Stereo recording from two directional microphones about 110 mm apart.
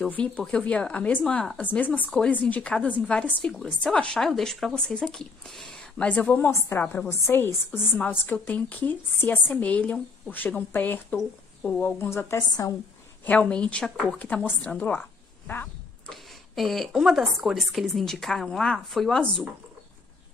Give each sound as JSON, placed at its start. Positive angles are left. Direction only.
{"t": 0.0, "sound": "speech", "side_deg": 10}
{"t": 2.0, "sound": "a woman's voice", "side_deg": 5}
{"t": 11.8, "sound": "a woman's voice", "side_deg": 20}
{"t": 13.2, "sound": "speech", "side_deg": 10}
{"t": 16.1, "sound": "a woman's voice", "side_deg": 0}